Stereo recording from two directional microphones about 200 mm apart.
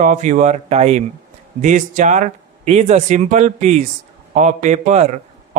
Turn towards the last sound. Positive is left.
turn(degrees=-35)  # may be behind; listen again after turning